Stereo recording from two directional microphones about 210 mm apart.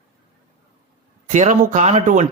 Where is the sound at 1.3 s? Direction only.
35° right (ahead or behind).